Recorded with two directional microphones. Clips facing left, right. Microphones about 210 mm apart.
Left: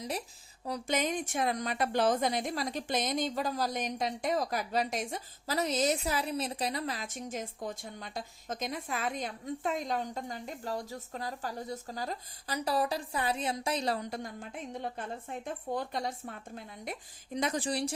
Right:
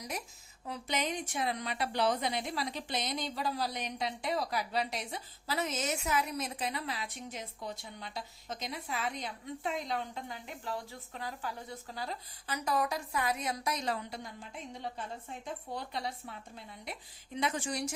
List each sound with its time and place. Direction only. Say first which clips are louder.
0.6 s a woman's voice: left 4 dB; 45° left (ahead or behind)